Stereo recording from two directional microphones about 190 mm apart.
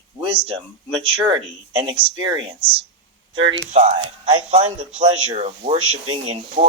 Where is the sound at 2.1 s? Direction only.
25° right (ahead or behind).